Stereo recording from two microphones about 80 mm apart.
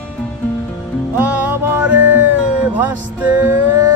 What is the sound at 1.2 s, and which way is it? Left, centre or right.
Music, right.